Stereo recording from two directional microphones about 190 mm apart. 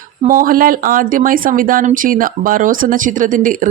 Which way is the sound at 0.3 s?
50° right (ahead or behind).